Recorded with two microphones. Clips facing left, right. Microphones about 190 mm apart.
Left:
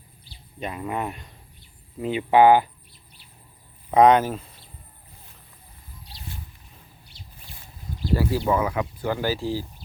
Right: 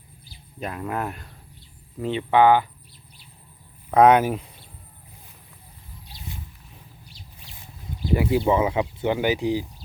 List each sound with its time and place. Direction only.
0.6 s speech: centre (ahead or behind)
3.9 s speech: 5° right (ahead or behind)
8.1 s speech: 15° right (ahead or behind)